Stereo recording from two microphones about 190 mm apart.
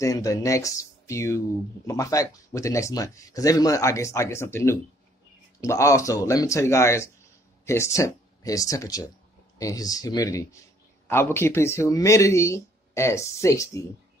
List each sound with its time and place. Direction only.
0.0 s speech: 15° left (ahead or behind)